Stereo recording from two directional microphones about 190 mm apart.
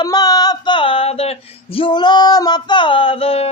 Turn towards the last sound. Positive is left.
turn(degrees=30)  # may be behind; listen again after turning